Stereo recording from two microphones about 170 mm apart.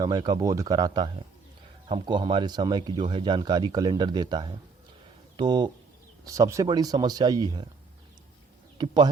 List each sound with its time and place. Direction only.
0.0 s speech: 25° right (ahead or behind)